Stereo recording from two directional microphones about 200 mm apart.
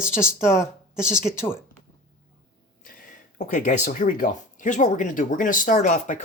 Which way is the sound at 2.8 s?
40° left (ahead or behind).